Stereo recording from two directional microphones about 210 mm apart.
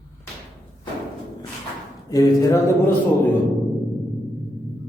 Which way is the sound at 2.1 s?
15° left (ahead or behind).